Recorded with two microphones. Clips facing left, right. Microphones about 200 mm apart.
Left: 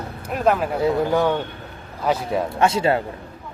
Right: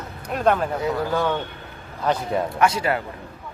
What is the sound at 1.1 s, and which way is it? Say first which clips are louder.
Speech: left 3 dB; 15° left (ahead or behind).